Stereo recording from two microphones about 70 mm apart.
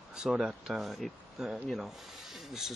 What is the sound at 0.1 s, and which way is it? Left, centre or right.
Speech, centre.